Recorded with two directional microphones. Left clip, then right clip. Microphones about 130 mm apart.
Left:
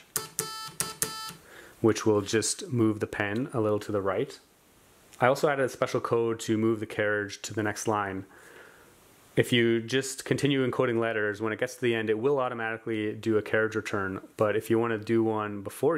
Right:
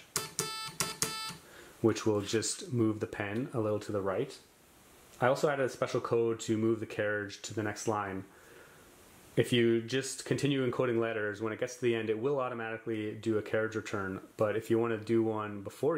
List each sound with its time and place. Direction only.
0.1 s music: 10° left (ahead or behind)
1.8 s speech: 35° left (ahead or behind)
9.3 s speech: 35° left (ahead or behind)